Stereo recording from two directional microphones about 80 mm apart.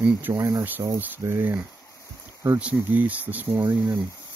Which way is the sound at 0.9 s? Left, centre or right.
Right.